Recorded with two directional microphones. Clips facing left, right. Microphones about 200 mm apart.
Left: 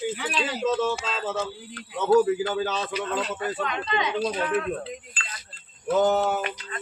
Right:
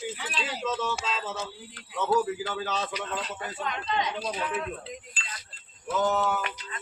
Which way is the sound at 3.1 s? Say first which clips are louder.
Left 7 dB; 80° left.